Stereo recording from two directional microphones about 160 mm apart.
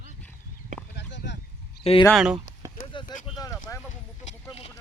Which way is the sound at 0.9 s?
90° left.